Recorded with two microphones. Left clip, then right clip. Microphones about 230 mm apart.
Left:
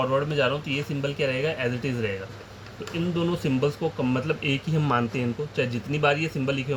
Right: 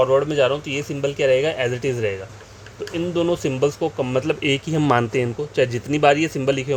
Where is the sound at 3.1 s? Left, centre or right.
Right.